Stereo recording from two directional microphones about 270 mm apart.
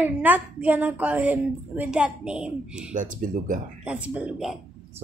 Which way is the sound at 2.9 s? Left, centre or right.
Right.